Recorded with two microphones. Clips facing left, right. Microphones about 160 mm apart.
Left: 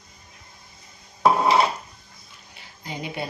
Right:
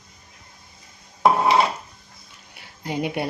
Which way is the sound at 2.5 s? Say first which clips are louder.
Right 7 dB; 65° right (ahead or behind).